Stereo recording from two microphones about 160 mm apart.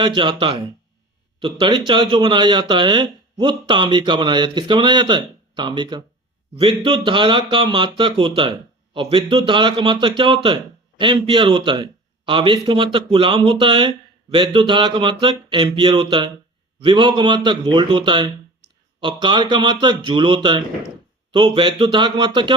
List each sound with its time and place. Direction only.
0.0 s speech: 30° right (ahead or behind)